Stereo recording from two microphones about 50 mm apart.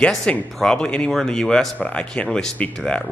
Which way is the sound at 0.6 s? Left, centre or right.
Centre.